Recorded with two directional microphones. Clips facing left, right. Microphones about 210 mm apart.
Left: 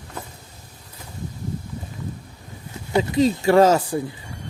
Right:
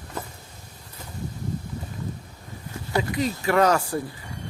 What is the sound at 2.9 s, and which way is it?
Speech, 25° left (ahead or behind).